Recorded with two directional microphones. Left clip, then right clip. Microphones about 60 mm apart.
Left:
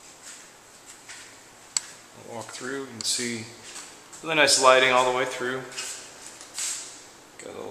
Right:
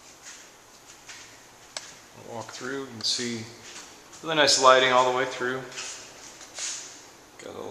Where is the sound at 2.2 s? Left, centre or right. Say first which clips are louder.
Even; centre.